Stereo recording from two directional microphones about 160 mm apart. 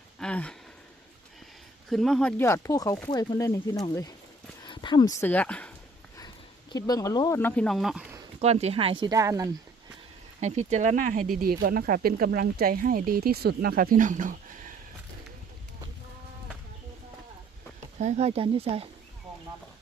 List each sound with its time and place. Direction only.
0.2 s a sound: 5° left (ahead or behind)
1.9 s speech: centre (ahead or behind)
2.4 s speech: 20° left (ahead or behind)
6.1 s speech: 25° left (ahead or behind); by 8.0 s centre (ahead or behind)
8.4 s speech: 40° right (ahead or behind); by 9.5 s 20° right (ahead or behind)
10.4 s speech: 45° right (ahead or behind)
11.3 s speech: 65° right (ahead or behind)
18.0 s speech: 40° right (ahead or behind)